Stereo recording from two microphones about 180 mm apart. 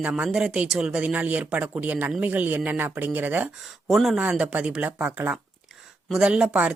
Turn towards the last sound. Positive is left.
turn(degrees=-5)  # may be behind; listen again after turning